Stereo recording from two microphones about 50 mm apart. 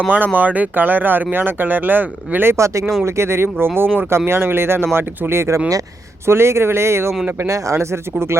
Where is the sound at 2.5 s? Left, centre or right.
Right.